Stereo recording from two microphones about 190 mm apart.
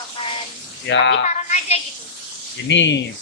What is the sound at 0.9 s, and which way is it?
Speech, 70° left (ahead or behind).